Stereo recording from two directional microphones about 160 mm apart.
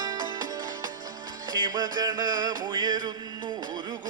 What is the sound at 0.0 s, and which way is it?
Music, 25° right (ahead or behind).